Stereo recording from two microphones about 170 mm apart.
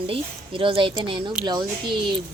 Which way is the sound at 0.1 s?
30° right (ahead or behind).